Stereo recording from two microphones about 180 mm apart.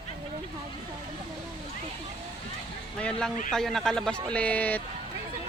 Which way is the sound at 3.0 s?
5° left (ahead or behind).